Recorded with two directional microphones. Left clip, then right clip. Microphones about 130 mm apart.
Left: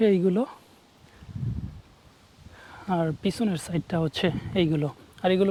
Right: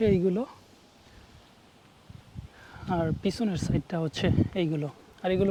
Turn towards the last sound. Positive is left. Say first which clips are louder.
# left 4 dB
turn(degrees=20)  # may be behind; listen again after turning